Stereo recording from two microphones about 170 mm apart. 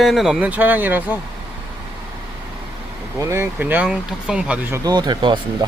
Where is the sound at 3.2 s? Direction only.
15° right (ahead or behind).